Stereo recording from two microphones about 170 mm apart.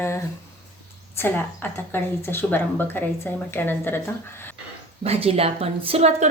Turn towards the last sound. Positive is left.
turn(degrees=-40)  # may be behind; listen again after turning